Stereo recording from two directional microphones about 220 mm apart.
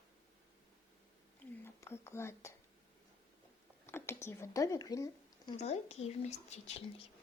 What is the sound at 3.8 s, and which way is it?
Speech, 10° left (ahead or behind).